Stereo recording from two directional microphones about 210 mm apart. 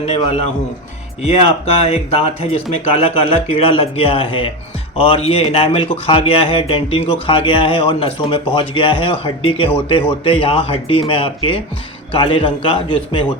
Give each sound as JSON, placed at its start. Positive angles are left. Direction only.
{"t": 0.0, "sound": "a man's voice", "side_deg": 30}